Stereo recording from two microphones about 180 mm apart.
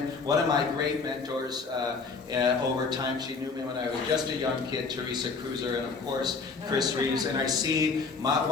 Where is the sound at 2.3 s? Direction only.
25° right (ahead or behind).